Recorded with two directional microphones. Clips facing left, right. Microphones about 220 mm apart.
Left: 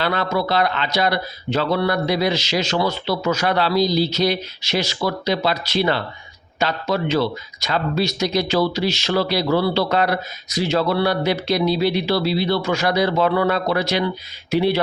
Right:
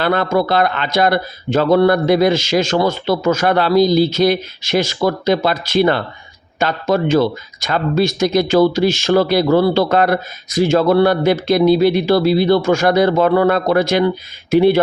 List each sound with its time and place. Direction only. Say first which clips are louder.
0.0 s speech: right 6 dB; 50° right (ahead or behind)